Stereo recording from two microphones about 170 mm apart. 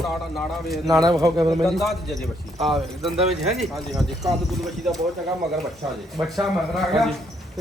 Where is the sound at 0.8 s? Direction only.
20° right (ahead or behind).